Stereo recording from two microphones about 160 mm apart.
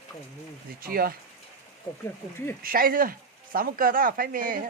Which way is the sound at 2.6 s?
65° right (ahead or behind).